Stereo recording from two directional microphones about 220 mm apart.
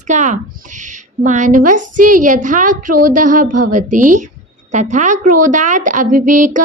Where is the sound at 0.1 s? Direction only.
35° right (ahead or behind).